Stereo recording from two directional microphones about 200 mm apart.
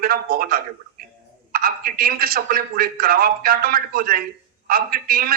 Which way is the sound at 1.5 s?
50° right (ahead or behind).